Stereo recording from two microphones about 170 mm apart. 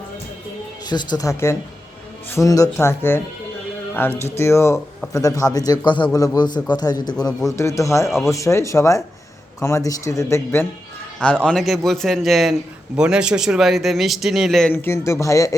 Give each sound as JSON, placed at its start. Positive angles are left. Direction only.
{"t": 0.9, "sound": "a man's voice", "side_deg": 25}
{"t": 14.7, "sound": "speech", "side_deg": 15}